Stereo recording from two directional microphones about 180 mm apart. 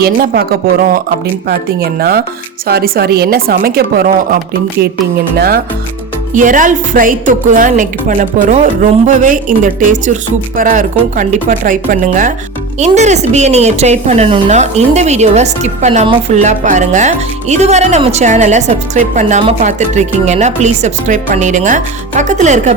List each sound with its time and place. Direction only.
0.0 s a woman's voice: 60° right (ahead or behind)
1.5 s a woman's voice: 60° right (ahead or behind)
6.3 s a woman's voice: 45° right (ahead or behind)